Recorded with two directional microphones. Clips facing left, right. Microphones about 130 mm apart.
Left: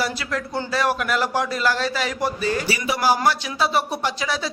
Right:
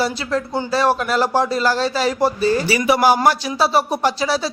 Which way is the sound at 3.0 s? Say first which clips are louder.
Right 2 dB; 55° right (ahead or behind).